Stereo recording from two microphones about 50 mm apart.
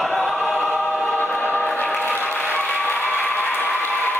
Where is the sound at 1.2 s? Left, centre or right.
Left.